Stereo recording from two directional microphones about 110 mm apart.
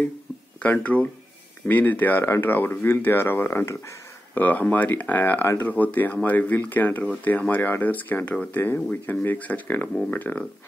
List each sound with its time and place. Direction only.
0.6 s speech: 15° left (ahead or behind)